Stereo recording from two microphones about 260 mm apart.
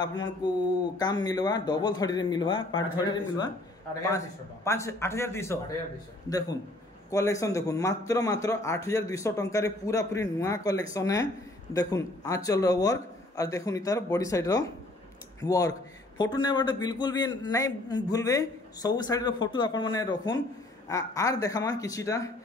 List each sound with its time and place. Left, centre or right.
0.0 s a man's voice: centre
4.6 s a man's voice: centre
7.1 s a man's voice: centre